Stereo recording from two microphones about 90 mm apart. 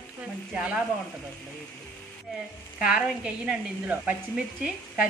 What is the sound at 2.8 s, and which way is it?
Speech, 10° right (ahead or behind).